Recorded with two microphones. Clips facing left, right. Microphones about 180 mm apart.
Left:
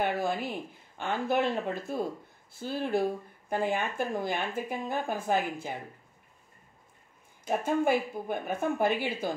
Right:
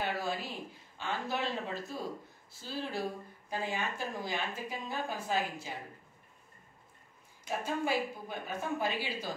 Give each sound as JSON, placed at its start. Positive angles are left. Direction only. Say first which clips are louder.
{"t": 0.0, "sound": "speech", "louder": "left 6 dB", "side_deg": 55}
{"t": 7.4, "sound": "speech", "louder": "left 7 dB", "side_deg": 55}